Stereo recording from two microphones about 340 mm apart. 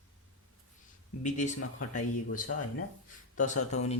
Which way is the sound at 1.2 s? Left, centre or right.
Left.